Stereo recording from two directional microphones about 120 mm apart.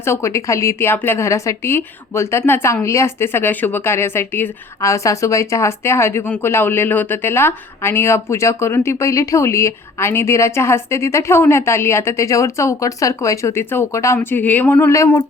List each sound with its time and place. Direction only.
0.0 s speech: 20° left (ahead or behind)